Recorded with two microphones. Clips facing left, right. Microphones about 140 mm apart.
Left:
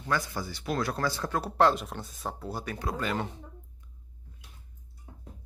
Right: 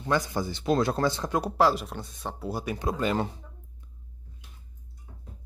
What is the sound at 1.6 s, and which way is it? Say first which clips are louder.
Speech: left 1 dB; 5° right (ahead or behind).